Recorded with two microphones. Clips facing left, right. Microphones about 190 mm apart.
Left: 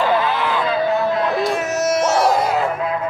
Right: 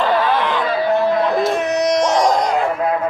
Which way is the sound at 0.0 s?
5° left (ahead or behind).